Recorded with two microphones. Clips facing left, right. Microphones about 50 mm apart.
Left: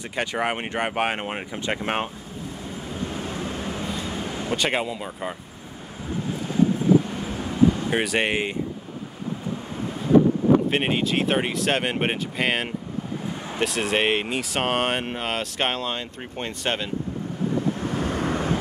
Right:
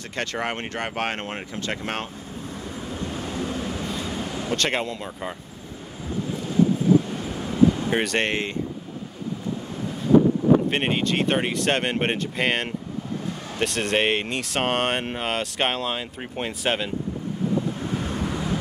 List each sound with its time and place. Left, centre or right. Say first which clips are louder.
0.1 s speech: left 2 dB; centre
3.1 s vehicle: right 1 dB; centre
7.1 s vehicle: even; centre
10.7 s speech: even; centre
17.7 s vehicle: left 2 dB; left